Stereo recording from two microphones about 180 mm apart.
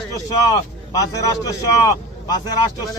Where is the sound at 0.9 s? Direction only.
20° left (ahead or behind).